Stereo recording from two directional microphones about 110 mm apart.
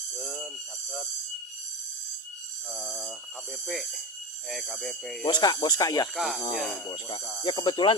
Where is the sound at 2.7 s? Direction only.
5° left (ahead or behind).